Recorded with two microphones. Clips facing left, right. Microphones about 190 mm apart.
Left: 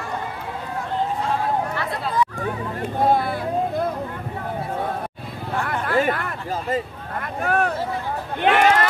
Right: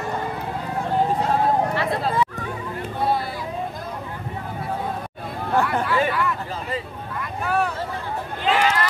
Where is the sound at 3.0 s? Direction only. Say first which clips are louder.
Left 4 dB; 50° left (ahead or behind).